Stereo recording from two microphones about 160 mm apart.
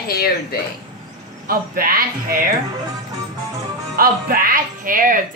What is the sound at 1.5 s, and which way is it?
Speech, 65° right (ahead or behind).